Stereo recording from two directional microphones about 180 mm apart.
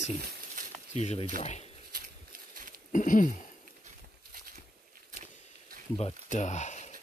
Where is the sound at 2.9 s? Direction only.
45° left (ahead or behind).